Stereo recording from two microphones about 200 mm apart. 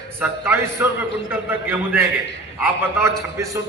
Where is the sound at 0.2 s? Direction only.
10° right (ahead or behind).